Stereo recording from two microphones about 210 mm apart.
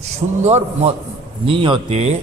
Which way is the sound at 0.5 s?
30° right (ahead or behind).